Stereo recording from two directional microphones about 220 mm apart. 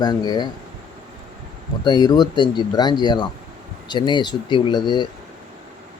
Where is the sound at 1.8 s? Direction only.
20° left (ahead or behind).